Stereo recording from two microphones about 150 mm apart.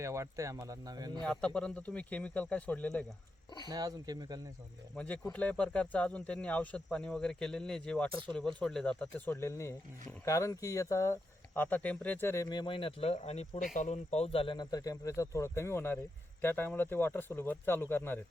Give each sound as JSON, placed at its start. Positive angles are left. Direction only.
{"t": 0.0, "sound": "speech", "side_deg": -20}
{"t": 1.2, "sound": "a man's voice", "side_deg": 5}
{"t": 3.7, "sound": "speech", "side_deg": -25}
{"t": 4.9, "sound": "a man's voice", "side_deg": 10}